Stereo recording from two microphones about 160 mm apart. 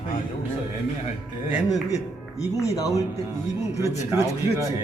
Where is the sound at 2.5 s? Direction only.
20° left (ahead or behind).